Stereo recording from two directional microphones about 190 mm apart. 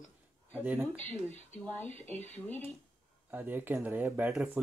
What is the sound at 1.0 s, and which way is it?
Speech, 10° left (ahead or behind).